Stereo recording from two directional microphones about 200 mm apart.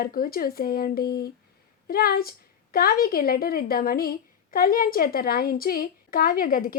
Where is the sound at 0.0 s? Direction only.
45° left (ahead or behind).